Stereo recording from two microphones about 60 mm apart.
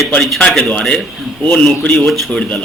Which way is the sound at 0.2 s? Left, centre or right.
Centre.